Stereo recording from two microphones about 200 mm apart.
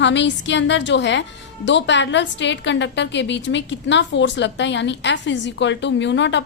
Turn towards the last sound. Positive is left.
turn(degrees=65)  # may be behind; listen again after turning